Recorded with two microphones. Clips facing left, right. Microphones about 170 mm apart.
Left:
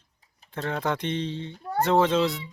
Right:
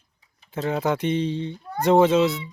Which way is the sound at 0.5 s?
5° right (ahead or behind).